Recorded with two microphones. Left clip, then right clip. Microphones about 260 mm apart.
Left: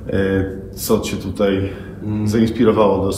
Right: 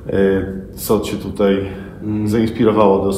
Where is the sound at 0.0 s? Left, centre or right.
Right.